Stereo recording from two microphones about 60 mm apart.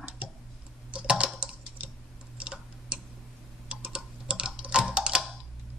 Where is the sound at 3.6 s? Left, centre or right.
Centre.